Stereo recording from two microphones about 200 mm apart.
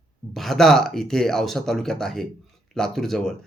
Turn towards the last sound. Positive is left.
turn(degrees=0)  # may be behind; listen again after turning